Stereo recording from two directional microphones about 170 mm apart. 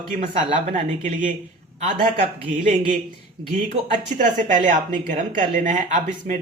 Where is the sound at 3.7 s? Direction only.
45° right (ahead or behind).